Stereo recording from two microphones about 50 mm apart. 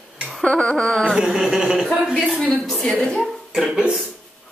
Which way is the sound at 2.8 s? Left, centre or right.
Centre.